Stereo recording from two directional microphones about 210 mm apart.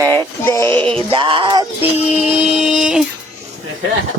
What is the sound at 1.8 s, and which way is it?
Music, 30° left (ahead or behind).